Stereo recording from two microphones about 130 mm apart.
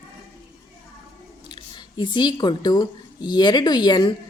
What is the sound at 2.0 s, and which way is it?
Speech, 35° left (ahead or behind).